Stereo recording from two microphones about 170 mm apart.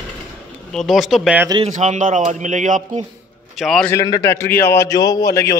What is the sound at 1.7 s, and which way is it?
Speech, 40° right (ahead or behind).